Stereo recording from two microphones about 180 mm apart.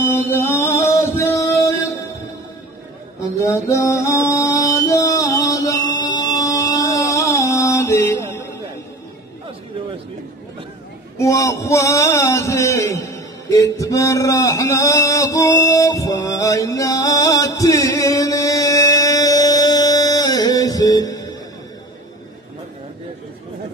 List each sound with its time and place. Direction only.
0.0 s music: 10° left (ahead or behind)
3.3 s music: 15° left (ahead or behind)
11.1 s a sound: 20° left (ahead or behind)